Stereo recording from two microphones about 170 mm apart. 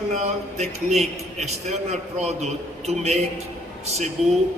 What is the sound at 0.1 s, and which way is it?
A man's voice, 40° right (ahead or behind).